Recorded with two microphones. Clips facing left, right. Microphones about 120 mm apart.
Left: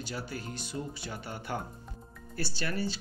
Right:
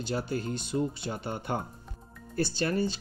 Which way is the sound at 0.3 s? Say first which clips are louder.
Right 7 dB; 25° right (ahead or behind).